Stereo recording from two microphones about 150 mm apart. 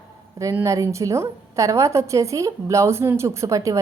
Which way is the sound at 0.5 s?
20° right (ahead or behind).